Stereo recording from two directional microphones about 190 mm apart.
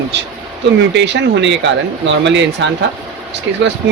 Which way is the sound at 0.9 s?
70° right (ahead or behind).